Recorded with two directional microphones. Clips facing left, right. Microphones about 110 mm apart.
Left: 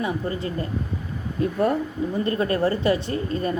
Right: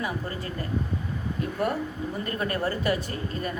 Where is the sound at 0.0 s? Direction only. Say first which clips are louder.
Left 5 dB; 25° left (ahead or behind).